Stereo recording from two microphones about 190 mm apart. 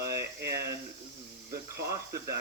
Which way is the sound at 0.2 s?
60° right (ahead or behind).